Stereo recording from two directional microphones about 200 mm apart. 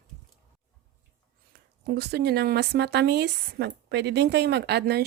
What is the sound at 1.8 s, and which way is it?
Speech, 50° right (ahead or behind).